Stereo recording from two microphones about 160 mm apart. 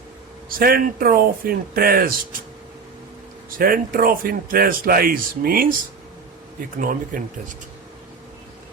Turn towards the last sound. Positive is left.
turn(degrees=-60)  # may be behind; listen again after turning